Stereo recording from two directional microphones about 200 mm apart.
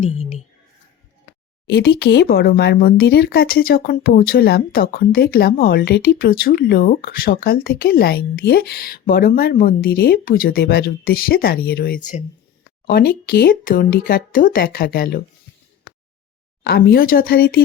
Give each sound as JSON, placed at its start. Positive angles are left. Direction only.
{"t": 1.6, "sound": "speech", "side_deg": 55}
{"t": 12.9, "sound": "speech", "side_deg": 55}
{"t": 16.6, "sound": "speech", "side_deg": 50}